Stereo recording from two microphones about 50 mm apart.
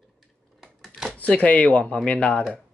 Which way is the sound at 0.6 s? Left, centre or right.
Centre.